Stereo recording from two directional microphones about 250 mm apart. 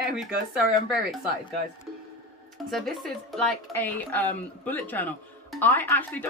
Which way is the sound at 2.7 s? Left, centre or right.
Centre.